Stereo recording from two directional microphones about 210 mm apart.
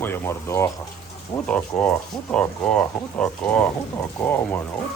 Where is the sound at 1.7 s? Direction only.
5° left (ahead or behind).